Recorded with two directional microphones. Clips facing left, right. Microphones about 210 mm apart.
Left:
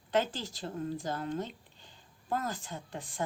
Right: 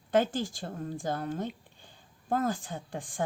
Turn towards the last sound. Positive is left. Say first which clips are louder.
# right 3 dB
turn(degrees=-50)  # may be behind; listen again after turning